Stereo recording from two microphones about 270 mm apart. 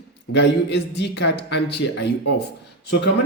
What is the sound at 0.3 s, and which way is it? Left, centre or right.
Speech, left.